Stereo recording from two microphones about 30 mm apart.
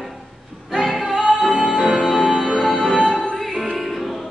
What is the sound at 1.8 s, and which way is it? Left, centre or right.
Music, centre.